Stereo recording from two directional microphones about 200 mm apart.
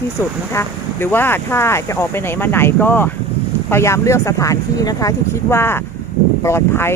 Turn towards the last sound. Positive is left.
turn(degrees=10)  # may be behind; listen again after turning